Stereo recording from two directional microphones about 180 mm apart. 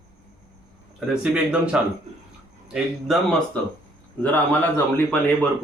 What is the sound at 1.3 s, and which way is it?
Speech, 5° right (ahead or behind).